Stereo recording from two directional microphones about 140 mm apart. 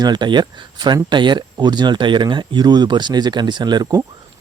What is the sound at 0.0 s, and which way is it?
Speech, 30° right (ahead or behind).